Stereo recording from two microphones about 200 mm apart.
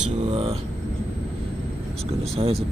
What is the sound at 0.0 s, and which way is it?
Speech, 30° right (ahead or behind).